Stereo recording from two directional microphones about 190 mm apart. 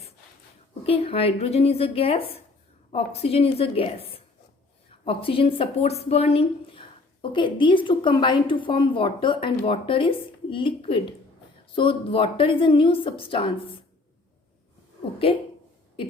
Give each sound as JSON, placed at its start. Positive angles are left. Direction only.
{"t": 0.9, "sound": "a woman's voice", "side_deg": 30}
{"t": 15.3, "sound": "a woman's voice", "side_deg": 30}